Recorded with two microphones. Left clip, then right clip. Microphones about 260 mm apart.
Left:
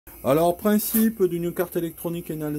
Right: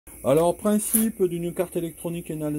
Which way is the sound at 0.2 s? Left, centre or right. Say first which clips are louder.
Even; centre.